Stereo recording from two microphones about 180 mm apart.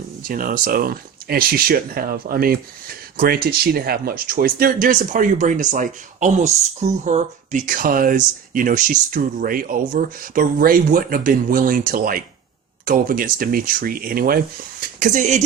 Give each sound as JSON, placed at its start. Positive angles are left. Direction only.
{"t": 0.2, "sound": "speech", "side_deg": -50}